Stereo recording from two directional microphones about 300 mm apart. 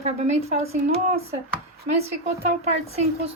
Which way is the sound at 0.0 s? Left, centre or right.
Right.